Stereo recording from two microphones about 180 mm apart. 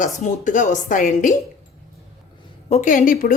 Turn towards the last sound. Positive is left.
turn(degrees=50)  # may be behind; listen again after turning